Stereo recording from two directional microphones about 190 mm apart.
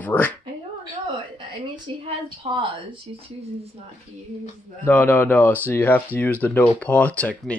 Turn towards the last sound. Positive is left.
turn(degrees=5)  # may be behind; listen again after turning